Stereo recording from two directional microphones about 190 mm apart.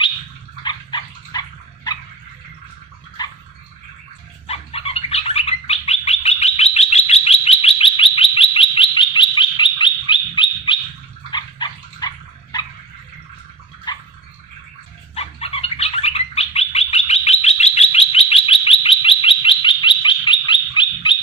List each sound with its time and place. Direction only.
0.7 s dog: 25° left (ahead or behind)
3.2 s dog: 20° left (ahead or behind)
4.5 s bird: 30° left (ahead or behind)
11.2 s dog: 25° left (ahead or behind)
13.9 s dog: 20° left (ahead or behind)
15.1 s bird: 30° left (ahead or behind)